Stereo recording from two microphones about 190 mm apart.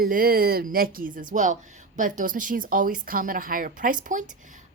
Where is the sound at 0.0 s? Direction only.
50° right (ahead or behind).